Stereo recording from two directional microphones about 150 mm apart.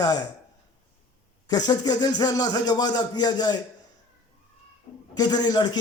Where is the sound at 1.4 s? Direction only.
25° left (ahead or behind).